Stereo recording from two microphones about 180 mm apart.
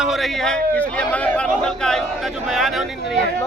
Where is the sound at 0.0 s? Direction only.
Centre (ahead or behind).